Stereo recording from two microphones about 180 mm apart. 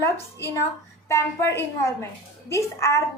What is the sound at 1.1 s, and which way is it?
A woman's voice, 15° left (ahead or behind).